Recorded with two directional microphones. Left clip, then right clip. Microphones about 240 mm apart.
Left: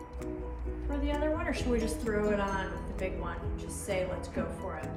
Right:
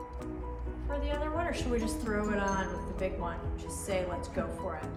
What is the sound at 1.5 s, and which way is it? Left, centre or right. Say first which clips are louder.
A woman's voice: left 1 dB; centre.